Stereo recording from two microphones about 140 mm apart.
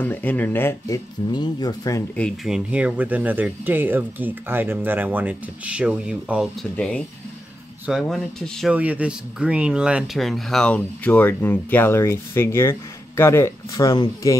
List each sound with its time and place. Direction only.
0.0 s speech: 10° left (ahead or behind)
2.4 s speech: 5° right (ahead or behind)
7.8 s speech: centre (ahead or behind)
8.7 s speech: 10° right (ahead or behind); by 14.3 s 30° left (ahead or behind)